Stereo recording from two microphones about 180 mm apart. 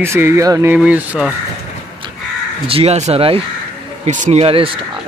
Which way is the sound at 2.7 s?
35° right (ahead or behind).